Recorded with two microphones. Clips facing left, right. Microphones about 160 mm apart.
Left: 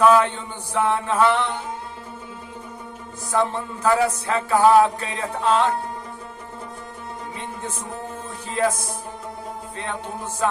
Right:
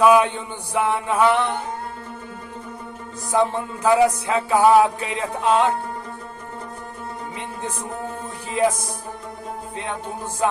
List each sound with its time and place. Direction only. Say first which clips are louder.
0.0 s speech: right 1 dB; 15° right (ahead or behind)
3.3 s speech: right 2 dB; 15° right (ahead or behind)
10.4 s speech: right 2 dB; 15° right (ahead or behind)